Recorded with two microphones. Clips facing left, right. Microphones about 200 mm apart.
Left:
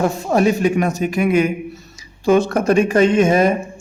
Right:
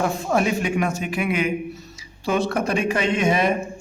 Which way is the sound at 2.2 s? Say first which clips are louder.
Left 7 dB; 45° left (ahead or behind).